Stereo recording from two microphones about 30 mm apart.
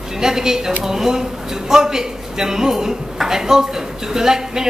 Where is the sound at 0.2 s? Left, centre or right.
Centre.